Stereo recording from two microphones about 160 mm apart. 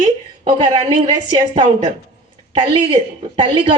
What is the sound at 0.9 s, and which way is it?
A woman's voice, 30° right (ahead or behind).